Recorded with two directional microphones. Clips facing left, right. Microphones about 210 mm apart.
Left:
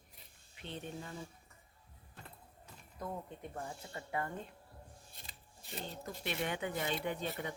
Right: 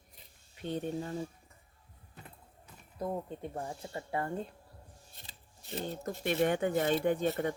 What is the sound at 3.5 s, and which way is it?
Speech, 30° right (ahead or behind).